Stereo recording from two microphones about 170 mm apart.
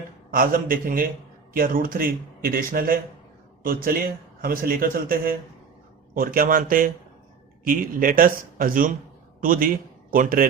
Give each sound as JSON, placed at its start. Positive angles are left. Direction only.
{"t": 0.3, "sound": "a man's voice", "side_deg": -55}